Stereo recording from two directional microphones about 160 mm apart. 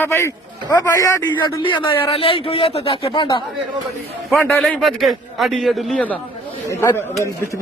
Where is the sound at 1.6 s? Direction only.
30° left (ahead or behind).